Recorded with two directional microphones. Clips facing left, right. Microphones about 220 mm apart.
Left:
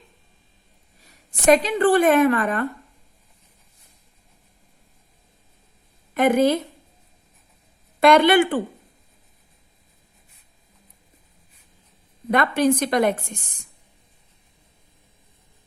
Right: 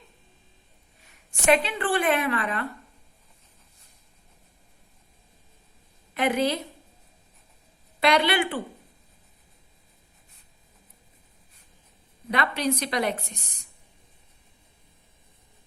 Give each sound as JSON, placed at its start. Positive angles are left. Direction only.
{"t": 1.0, "sound": "a woman's voice", "side_deg": 40}
{"t": 6.1, "sound": "a woman's voice", "side_deg": 50}
{"t": 8.0, "sound": "a woman's voice", "side_deg": 50}
{"t": 12.3, "sound": "a woman's voice", "side_deg": 50}